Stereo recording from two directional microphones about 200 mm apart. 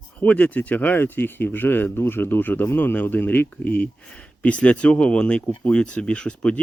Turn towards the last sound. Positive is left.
turn(degrees=5)  # may be behind; listen again after turning